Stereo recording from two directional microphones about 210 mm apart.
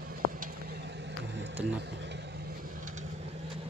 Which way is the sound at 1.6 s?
55° right (ahead or behind).